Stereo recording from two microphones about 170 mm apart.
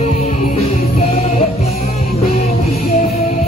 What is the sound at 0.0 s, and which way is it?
Music, 40° left (ahead or behind).